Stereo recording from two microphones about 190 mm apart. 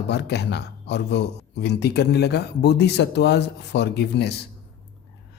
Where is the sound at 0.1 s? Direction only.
60° left (ahead or behind).